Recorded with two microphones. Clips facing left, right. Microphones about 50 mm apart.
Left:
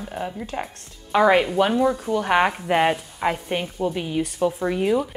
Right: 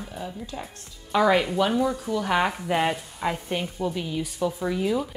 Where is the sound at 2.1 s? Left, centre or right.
Left.